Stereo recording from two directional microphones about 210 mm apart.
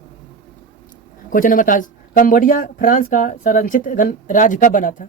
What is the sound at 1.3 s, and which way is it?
Speech, 40° left (ahead or behind).